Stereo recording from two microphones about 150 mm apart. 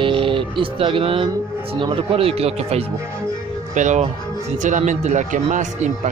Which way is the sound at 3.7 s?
55° right (ahead or behind).